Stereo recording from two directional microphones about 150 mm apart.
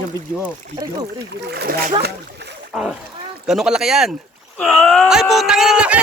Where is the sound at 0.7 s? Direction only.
25° right (ahead or behind).